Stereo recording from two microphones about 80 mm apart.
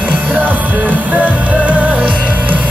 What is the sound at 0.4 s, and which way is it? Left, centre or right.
Music, right.